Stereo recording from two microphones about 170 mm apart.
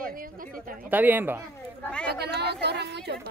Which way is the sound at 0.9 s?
10° right (ahead or behind).